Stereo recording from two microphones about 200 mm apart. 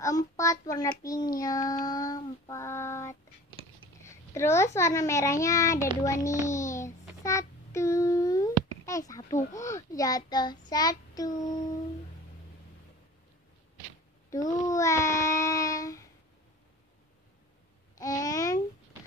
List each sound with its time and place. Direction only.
0.0 s child singing: 15° left (ahead or behind)
4.0 s a child's voice: 15° left (ahead or behind)
6.0 s child singing: 15° left (ahead or behind)
14.3 s child singing: 15° left (ahead or behind)
17.9 s babbling: 15° left (ahead or behind)